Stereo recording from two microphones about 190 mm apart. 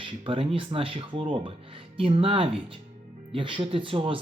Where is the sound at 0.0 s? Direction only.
30° right (ahead or behind).